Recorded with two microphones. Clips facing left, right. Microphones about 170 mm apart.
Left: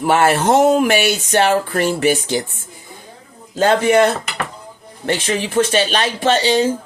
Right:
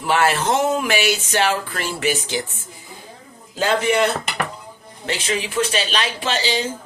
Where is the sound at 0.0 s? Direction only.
50° left (ahead or behind).